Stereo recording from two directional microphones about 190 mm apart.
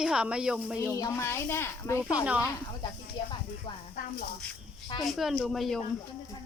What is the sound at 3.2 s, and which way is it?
Speech, 20° left (ahead or behind).